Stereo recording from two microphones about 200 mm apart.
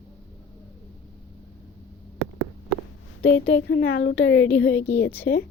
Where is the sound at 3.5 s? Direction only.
60° left (ahead or behind).